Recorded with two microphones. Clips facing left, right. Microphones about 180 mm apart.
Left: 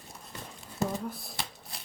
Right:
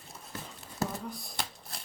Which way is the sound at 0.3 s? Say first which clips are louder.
Right 2 dB; centre (ahead or behind).